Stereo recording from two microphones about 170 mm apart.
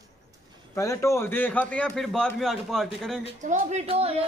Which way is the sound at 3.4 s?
45° right (ahead or behind).